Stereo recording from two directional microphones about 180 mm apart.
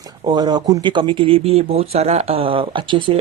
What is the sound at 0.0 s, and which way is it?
Speech, 25° right (ahead or behind).